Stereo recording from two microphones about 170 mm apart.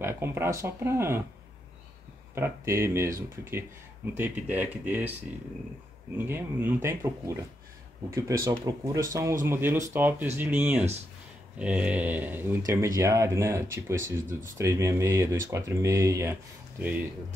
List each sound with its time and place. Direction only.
0.0 s speech: 15° right (ahead or behind)
2.3 s speech: 15° right (ahead or behind)
6.1 s speech: 10° right (ahead or behind)